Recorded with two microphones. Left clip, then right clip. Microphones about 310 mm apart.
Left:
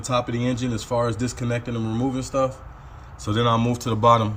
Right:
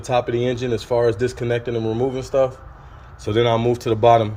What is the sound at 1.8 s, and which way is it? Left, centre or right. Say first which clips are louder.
Speech: right 6 dB; right.